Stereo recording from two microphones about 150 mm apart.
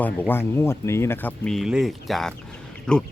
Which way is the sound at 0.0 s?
10° left (ahead or behind).